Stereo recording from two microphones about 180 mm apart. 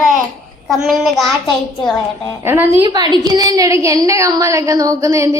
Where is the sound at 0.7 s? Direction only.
Centre (ahead or behind).